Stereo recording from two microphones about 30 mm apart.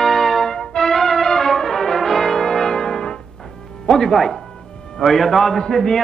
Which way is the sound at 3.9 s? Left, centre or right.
Centre.